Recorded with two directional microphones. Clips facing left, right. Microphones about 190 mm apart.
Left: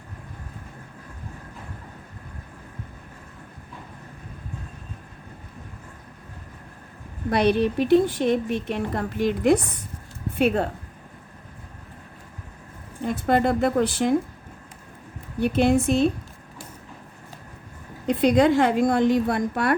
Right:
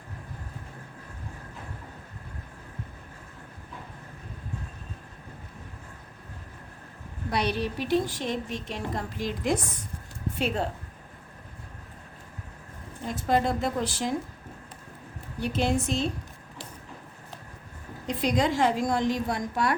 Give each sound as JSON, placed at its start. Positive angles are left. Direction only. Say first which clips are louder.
{"t": 7.3, "sound": "a woman's voice", "louder": "left 8 dB", "side_deg": 55}
{"t": 13.1, "sound": "a woman's voice", "louder": "left 4 dB", "side_deg": 60}
{"t": 15.4, "sound": "a woman's voice", "louder": "left 7 dB", "side_deg": 55}
{"t": 18.0, "sound": "a woman's voice", "louder": "left 8 dB", "side_deg": 60}